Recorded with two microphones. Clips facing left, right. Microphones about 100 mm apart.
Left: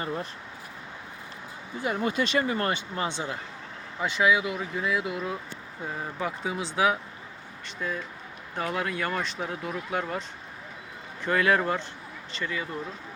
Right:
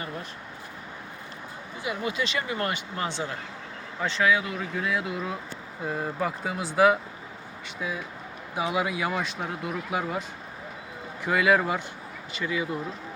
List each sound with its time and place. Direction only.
1.8 s speech: 45° left (ahead or behind); by 12.6 s 10° right (ahead or behind)